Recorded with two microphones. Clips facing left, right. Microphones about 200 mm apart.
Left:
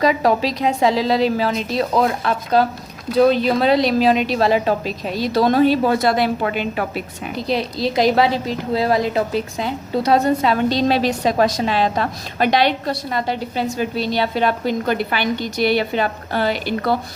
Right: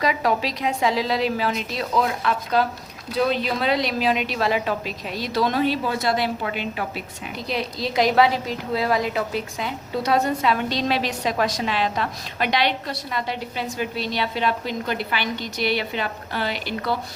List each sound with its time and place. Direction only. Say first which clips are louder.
0.0 s a woman's voice: left 6 dB; 35° left (ahead or behind); by 7.0 s 55° left (ahead or behind)
7.3 s a woman's voice: left 6 dB; 35° left (ahead or behind)